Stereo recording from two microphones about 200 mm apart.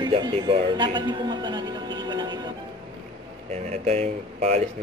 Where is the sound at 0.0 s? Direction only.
25° right (ahead or behind).